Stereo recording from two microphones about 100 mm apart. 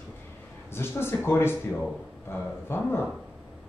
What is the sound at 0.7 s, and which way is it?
Speech, 25° left (ahead or behind).